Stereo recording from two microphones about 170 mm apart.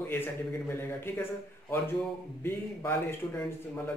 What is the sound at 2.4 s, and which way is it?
A man's voice, 15° left (ahead or behind).